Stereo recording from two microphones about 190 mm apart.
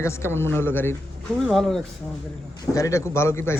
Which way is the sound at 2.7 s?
15° left (ahead or behind).